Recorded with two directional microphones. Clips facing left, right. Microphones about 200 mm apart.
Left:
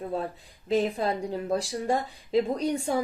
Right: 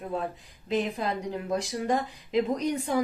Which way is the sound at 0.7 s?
35° left (ahead or behind).